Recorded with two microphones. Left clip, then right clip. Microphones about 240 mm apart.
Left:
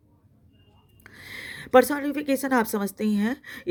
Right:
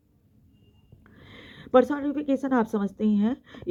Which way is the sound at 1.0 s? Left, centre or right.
Left.